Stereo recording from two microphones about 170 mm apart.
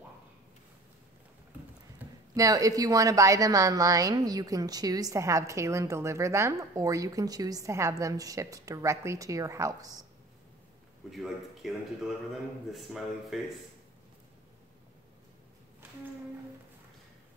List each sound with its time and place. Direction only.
2.3 s a woman's voice: 20° right (ahead or behind)
11.1 s a man's voice: centre (ahead or behind)
12.7 s a man's voice: centre (ahead or behind)